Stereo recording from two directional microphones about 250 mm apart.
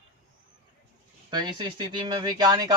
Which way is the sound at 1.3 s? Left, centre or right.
Centre.